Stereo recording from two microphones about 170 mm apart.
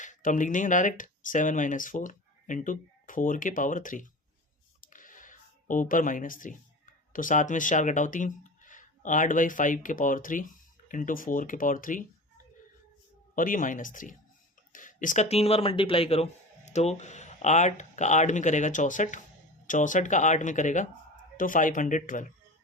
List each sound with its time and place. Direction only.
0.0 s speech: 50° left (ahead or behind)
4.9 s a sound: 50° left (ahead or behind)
7.1 s speech: 50° left (ahead or behind)
13.3 s speech: 50° left (ahead or behind)